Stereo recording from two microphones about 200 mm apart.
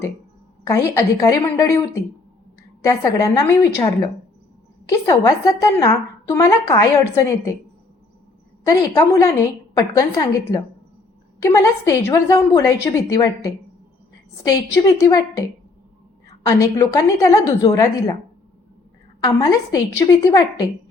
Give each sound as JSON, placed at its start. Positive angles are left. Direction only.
{"t": 0.6, "sound": "a woman's voice", "side_deg": 15}
{"t": 4.9, "sound": "a woman's voice", "side_deg": 15}
{"t": 8.6, "sound": "a woman's voice", "side_deg": 15}
{"t": 16.5, "sound": "a woman's voice", "side_deg": 15}
{"t": 19.2, "sound": "a woman's voice", "side_deg": 20}